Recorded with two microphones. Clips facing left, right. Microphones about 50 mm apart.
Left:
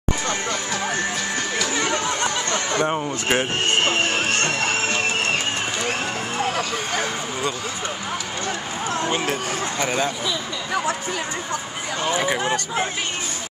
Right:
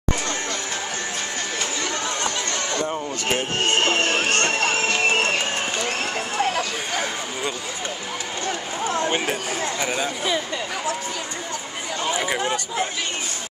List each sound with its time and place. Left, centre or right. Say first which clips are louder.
2.8 s speech: left 3 dB; left
4.2 s music: right 1 dB; centre
6.5 s a sound: left 1 dB; centre
9.0 s speech: left 2 dB; centre
9.3 s speech: left 1 dB; centre
12.1 s speech: left 2 dB; centre